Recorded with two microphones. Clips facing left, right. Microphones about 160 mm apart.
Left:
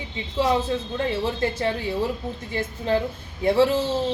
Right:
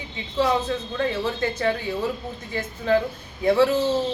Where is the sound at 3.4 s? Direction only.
25° left (ahead or behind).